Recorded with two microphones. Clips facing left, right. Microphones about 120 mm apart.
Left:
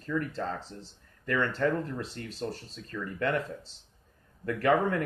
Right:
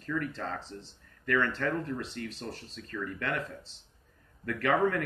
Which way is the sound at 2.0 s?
35° left (ahead or behind).